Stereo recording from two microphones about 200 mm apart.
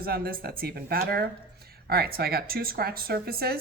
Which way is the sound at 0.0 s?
50° right (ahead or behind).